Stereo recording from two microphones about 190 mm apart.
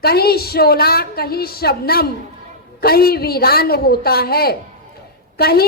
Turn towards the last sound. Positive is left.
turn(degrees=55)  # may be behind; listen again after turning